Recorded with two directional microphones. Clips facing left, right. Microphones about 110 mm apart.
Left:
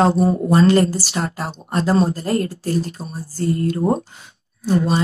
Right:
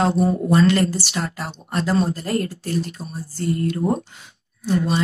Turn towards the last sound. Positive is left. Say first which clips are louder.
# left 3 dB
turn(degrees=35)  # may be behind; listen again after turning